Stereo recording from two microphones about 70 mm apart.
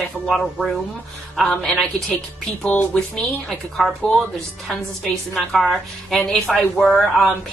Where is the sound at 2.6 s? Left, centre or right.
Centre.